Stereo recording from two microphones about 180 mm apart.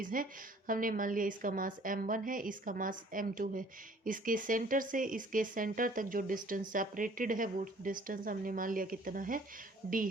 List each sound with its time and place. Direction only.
0.0 s speech: 50° right (ahead or behind)
9.8 s speech: 65° right (ahead or behind)